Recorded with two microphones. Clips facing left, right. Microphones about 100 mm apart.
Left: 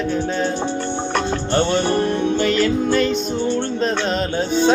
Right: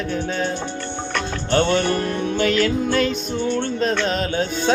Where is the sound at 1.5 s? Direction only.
15° left (ahead or behind).